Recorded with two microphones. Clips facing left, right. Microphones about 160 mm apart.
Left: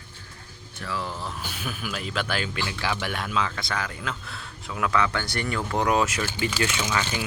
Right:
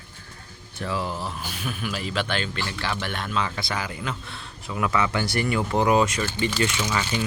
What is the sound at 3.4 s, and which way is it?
Speech, 5° right (ahead or behind).